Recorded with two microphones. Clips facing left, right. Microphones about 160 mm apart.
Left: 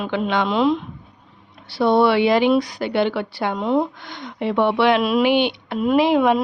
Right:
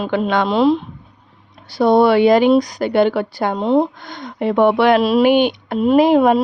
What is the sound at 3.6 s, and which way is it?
Speech, 30° right (ahead or behind).